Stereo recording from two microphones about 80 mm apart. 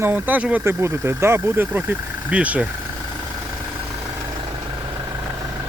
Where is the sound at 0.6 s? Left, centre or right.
Right; by 2.6 s centre.